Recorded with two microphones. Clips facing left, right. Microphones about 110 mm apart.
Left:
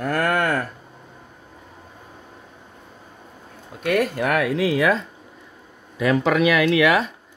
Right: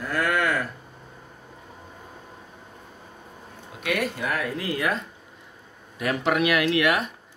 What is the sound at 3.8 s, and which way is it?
Speech, 45° left (ahead or behind).